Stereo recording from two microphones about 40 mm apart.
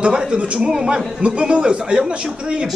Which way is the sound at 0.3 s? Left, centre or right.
Right.